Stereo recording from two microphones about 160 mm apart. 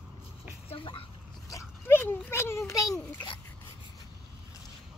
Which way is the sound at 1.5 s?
15° left (ahead or behind).